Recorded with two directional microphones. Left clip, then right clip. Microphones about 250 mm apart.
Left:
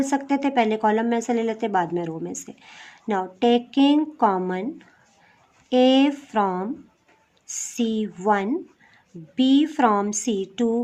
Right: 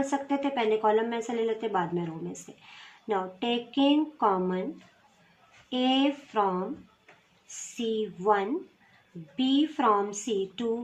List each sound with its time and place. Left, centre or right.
0.1 s speech: left
5.6 s speech: left
7.8 s speech: left